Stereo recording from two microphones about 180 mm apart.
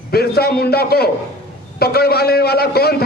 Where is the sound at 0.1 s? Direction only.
60° left (ahead or behind).